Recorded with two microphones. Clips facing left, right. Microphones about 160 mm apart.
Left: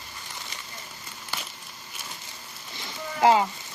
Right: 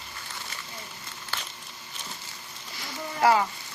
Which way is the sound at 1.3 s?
10° left (ahead or behind).